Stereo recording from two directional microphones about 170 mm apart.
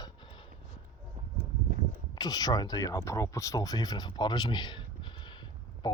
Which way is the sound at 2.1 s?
20° left (ahead or behind).